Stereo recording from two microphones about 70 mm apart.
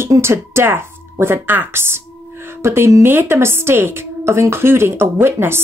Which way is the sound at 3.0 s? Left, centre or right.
Right.